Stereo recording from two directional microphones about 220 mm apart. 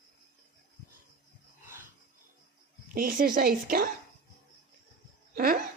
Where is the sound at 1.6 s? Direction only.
10° right (ahead or behind).